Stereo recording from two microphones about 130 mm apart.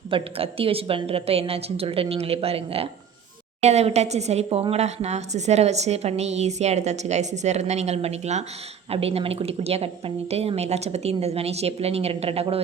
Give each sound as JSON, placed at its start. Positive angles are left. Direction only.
{"t": 0.1, "sound": "a woman's voice", "side_deg": -45}